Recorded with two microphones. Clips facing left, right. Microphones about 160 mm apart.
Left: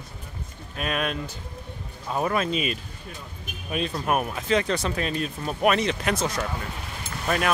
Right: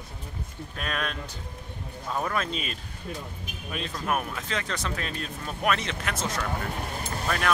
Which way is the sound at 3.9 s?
25° left (ahead or behind).